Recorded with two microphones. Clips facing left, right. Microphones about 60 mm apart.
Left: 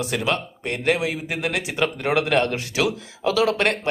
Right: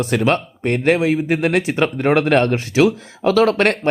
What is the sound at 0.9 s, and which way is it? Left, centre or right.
Speech, right.